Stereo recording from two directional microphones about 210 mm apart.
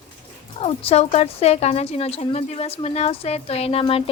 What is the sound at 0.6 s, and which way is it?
Speech, 30° left (ahead or behind).